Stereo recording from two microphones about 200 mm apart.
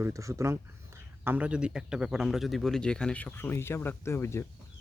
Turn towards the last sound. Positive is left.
turn(degrees=15)  # may be behind; listen again after turning